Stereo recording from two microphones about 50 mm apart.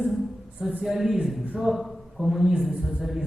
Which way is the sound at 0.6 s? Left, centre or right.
Centre.